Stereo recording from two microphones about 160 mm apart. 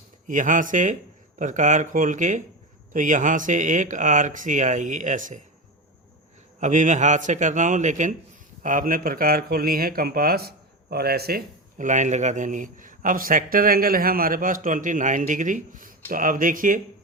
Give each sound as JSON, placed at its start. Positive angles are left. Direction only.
{"t": 0.3, "sound": "speech", "side_deg": -55}
{"t": 6.6, "sound": "speech", "side_deg": -50}